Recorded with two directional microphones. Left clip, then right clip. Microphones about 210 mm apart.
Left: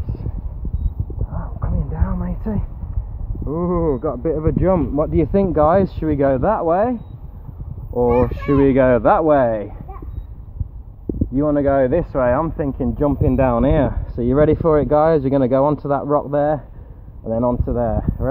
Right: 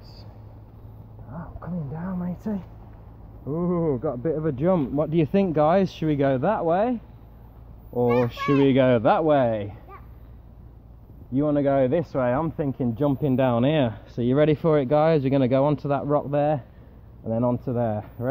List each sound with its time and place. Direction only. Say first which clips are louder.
1.3 s a sound: left 4 dB; 35° right (ahead or behind)
3.4 s speech: left 6 dB; 35° right (ahead or behind)
8.3 s speech: left 5 dB; 40° right (ahead or behind)
11.3 s speech: left 5 dB; 35° right (ahead or behind)